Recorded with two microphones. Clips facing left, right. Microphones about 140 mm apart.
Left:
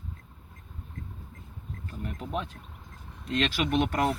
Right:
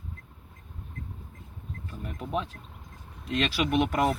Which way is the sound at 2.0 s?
5° right (ahead or behind).